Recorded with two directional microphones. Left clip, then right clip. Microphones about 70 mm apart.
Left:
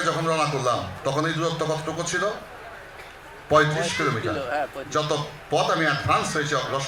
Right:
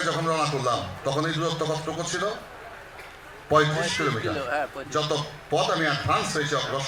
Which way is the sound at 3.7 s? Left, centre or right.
Left.